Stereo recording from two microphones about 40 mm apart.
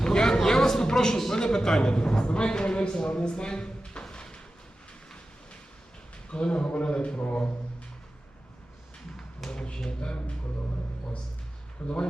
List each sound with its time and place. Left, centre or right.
0.0 s a sound: centre
1.5 s a man's voice: centre
6.3 s a man's voice: left
9.5 s a man's voice: left